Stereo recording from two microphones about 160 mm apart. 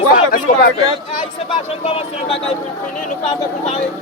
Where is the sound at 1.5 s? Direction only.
35° left (ahead or behind).